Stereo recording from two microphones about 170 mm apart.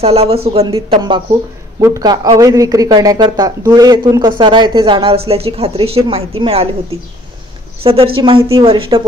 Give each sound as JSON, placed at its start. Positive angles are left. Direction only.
{"t": 0.0, "sound": "speech", "side_deg": -35}
{"t": 1.8, "sound": "speech", "side_deg": -15}
{"t": 7.8, "sound": "speech", "side_deg": -30}